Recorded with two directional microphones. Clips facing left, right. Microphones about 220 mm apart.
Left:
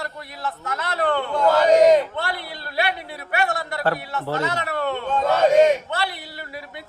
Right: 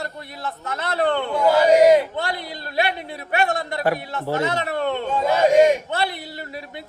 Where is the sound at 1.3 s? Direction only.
10° right (ahead or behind).